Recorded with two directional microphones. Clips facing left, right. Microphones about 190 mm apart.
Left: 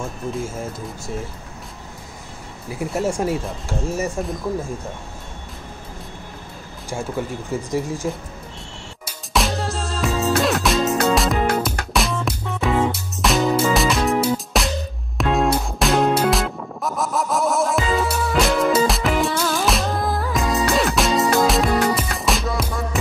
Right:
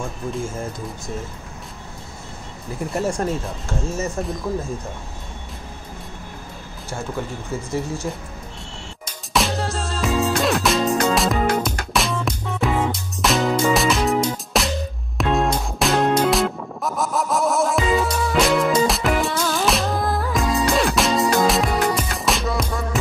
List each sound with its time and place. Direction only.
2.7 s speech: 10° left (ahead or behind)
7.5 s speech: 10° left (ahead or behind)
9.0 s music: centre (ahead or behind)